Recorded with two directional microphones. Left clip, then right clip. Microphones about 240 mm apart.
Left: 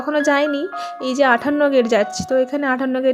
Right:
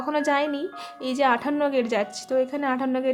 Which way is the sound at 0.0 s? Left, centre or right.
Centre.